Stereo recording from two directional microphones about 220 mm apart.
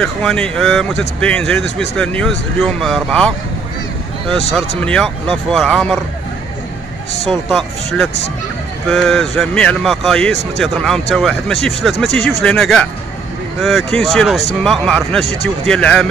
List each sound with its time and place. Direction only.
0.0 s speech: 5° left (ahead or behind)
4.8 s speech: 5° left (ahead or behind)
7.2 s speech: centre (ahead or behind)
12.1 s speech: 50° left (ahead or behind)
12.4 s speech: 5° left (ahead or behind)